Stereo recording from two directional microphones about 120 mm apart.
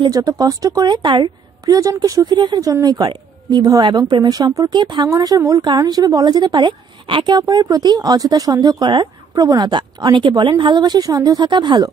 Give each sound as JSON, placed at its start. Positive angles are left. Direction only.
{"t": 0.0, "sound": "a woman's voice", "side_deg": -35}